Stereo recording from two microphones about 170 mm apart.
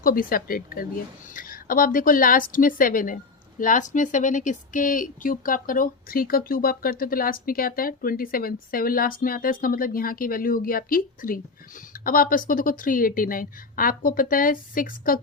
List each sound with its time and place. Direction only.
0.0 s speech: 55° left (ahead or behind)